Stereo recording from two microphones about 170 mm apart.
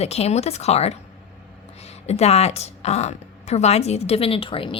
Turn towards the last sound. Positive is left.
turn(degrees=30)  # may be behind; listen again after turning